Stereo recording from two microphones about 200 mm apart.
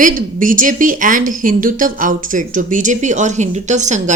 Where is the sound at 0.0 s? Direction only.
40° right (ahead or behind).